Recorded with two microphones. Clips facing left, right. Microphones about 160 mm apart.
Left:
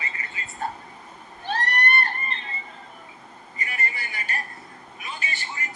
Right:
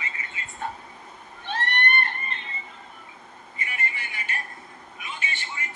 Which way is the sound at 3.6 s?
40° left (ahead or behind).